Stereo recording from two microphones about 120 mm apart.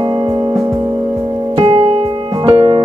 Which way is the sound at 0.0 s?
40° right (ahead or behind).